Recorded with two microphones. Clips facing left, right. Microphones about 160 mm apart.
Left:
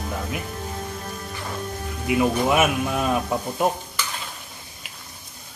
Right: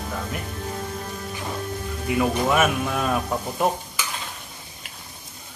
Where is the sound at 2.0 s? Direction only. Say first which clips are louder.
Left 2 dB; 10° left (ahead or behind).